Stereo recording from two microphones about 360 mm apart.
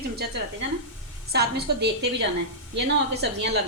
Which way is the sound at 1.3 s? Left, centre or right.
Right.